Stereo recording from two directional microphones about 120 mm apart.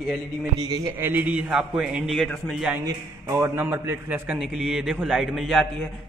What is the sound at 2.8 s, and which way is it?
A man's voice, 25° right (ahead or behind).